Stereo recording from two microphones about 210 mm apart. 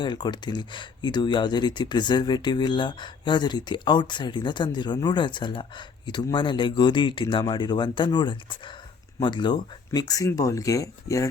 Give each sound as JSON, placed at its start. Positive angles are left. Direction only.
{"t": 0.0, "sound": "speech", "side_deg": 20}